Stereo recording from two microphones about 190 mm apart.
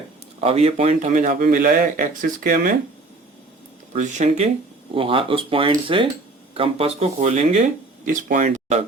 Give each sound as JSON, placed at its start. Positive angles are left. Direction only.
{"t": 0.3, "sound": "a man's voice", "side_deg": -30}
{"t": 3.9, "sound": "speech", "side_deg": -40}
{"t": 4.9, "sound": "speech", "side_deg": -30}
{"t": 8.0, "sound": "speech", "side_deg": -45}